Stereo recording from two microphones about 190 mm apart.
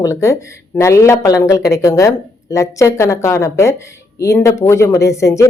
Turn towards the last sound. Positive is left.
turn(degrees=15)  # may be behind; listen again after turning